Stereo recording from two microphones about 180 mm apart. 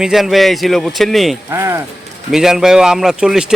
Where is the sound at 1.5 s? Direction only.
15° right (ahead or behind).